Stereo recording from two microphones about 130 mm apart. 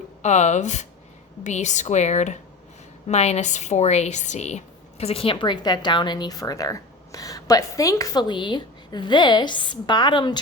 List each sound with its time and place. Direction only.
0.2 s speech: 65° left (ahead or behind); by 10.4 s 35° left (ahead or behind)